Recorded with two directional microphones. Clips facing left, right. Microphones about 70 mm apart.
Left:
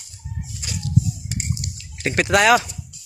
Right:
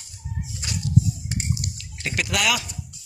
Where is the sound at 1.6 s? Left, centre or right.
Left.